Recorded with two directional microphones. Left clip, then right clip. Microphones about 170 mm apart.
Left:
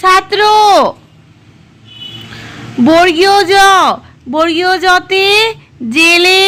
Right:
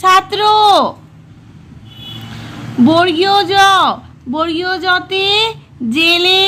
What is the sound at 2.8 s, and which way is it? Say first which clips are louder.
A woman's voice: left 4 dB; 20° left (ahead or behind).